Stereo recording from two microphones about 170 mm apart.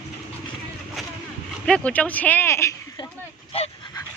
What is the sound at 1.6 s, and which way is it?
Speech, 5° left (ahead or behind).